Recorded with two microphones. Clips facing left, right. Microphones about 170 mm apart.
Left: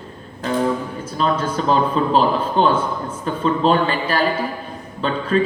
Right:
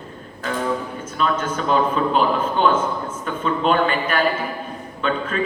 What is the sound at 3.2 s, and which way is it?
A man's voice, 30° left (ahead or behind).